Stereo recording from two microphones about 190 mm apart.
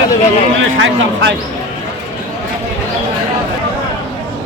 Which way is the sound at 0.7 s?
85° right.